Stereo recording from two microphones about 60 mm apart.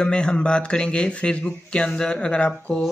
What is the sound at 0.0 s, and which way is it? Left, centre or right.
Speech, centre.